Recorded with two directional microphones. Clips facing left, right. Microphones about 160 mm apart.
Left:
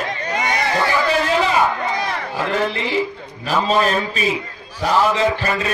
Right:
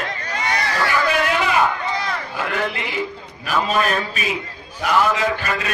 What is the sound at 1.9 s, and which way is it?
A man's voice, 30° left (ahead or behind).